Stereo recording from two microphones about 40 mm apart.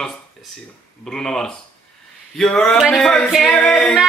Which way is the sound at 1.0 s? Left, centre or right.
Centre.